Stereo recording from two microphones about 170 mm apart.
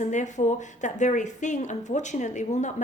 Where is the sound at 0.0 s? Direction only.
45° left (ahead or behind).